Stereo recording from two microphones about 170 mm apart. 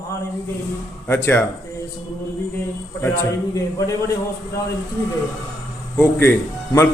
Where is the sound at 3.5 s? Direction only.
20° left (ahead or behind).